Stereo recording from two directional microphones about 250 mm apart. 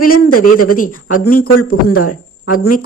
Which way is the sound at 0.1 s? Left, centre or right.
Left.